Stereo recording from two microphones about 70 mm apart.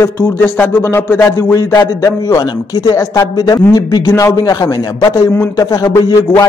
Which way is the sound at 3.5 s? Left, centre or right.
Left.